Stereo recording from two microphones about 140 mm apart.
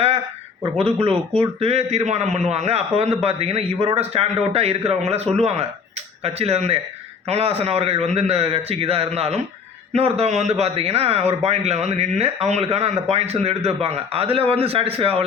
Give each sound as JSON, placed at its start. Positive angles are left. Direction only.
{"t": 0.6, "sound": "a man's voice", "side_deg": -40}